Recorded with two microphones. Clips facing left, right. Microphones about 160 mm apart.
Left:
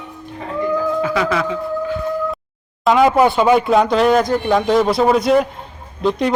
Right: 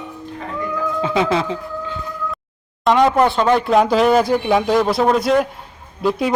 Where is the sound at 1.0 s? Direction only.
25° right (ahead or behind).